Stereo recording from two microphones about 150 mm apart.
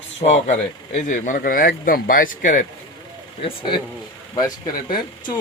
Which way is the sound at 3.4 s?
35° left (ahead or behind).